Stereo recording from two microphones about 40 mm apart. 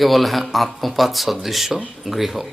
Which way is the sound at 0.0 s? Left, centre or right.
Centre.